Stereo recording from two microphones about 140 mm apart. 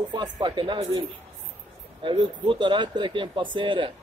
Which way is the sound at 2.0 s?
35° right (ahead or behind).